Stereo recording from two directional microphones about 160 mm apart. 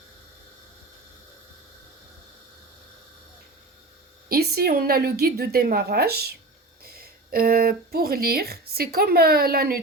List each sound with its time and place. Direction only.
4.3 s a woman's voice: 75° right (ahead or behind)